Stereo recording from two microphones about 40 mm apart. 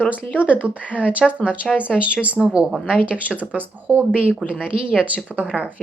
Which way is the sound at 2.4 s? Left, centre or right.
Centre.